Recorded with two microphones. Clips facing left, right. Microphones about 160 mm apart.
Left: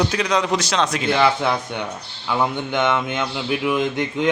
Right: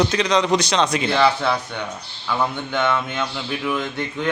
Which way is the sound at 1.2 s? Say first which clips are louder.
Even; 15° left (ahead or behind).